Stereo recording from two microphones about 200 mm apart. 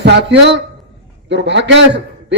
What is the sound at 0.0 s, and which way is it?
A man's voice, 60° right (ahead or behind).